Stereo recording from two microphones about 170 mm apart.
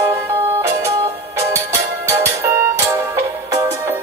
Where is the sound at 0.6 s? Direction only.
15° right (ahead or behind).